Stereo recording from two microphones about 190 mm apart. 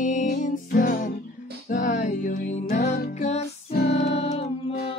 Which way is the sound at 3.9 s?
35° left (ahead or behind).